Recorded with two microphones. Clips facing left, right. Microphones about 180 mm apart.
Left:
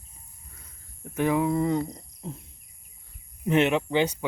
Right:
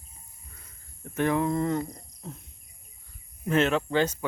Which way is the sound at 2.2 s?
30° left (ahead or behind).